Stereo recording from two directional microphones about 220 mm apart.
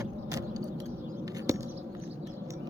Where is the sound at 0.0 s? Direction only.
15° right (ahead or behind).